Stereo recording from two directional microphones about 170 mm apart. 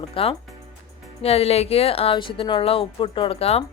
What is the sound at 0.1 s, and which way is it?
Speech, 35° left (ahead or behind).